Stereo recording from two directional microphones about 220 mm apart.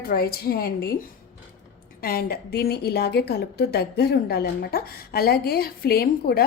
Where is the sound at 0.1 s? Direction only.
45° left (ahead or behind).